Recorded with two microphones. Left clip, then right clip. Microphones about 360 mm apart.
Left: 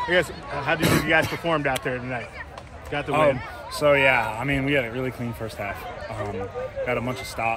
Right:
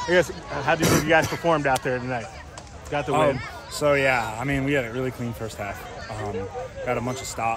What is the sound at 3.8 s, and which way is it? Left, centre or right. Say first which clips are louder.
Speech: left 2 dB; centre.